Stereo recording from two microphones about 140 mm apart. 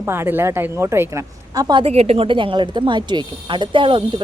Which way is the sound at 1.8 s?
45° right (ahead or behind).